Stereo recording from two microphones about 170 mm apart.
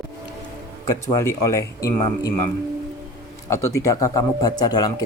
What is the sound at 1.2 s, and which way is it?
Speech, 15° left (ahead or behind).